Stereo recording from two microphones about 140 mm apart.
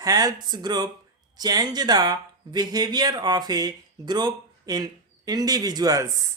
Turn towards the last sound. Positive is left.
turn(degrees=-20)  # may be behind; listen again after turning